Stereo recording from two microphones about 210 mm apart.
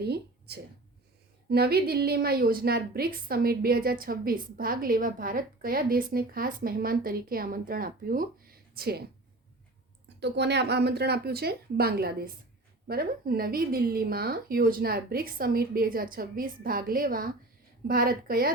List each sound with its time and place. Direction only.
0.0 s a woman's voice: 50° right (ahead or behind)
10.2 s a woman's voice: 55° right (ahead or behind)